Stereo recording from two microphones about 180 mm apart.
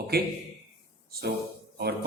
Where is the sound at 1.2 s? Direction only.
65° right (ahead or behind).